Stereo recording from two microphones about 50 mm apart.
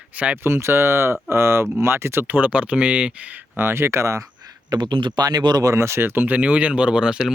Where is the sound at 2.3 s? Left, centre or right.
Right.